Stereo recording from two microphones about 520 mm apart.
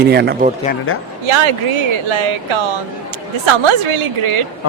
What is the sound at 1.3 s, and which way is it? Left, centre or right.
A woman's voice, right.